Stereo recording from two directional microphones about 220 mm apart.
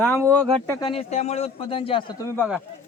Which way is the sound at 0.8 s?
25° left (ahead or behind).